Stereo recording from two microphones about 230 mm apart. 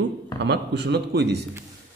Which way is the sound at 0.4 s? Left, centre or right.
Right.